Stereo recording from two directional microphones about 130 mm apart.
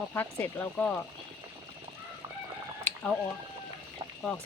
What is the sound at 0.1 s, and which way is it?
Speech, 15° left (ahead or behind).